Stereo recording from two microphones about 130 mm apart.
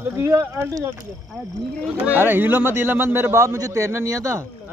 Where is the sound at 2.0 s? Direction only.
15° right (ahead or behind).